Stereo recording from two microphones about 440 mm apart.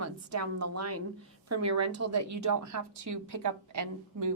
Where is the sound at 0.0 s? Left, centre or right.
Right.